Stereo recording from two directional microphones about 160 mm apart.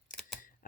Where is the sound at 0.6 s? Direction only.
55° left (ahead or behind).